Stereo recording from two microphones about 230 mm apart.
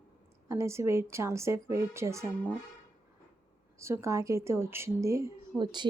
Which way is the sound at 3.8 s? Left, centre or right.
Centre.